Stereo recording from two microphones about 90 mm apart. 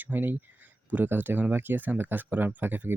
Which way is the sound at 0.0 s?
20° right (ahead or behind).